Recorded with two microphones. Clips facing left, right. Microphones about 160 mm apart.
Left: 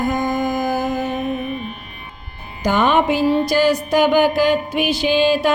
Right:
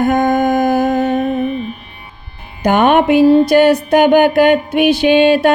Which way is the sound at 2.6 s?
60° right (ahead or behind).